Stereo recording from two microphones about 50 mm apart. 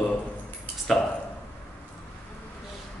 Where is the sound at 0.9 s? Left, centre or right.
Centre.